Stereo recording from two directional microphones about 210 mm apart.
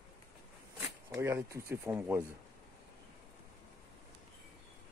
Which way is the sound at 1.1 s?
15° right (ahead or behind).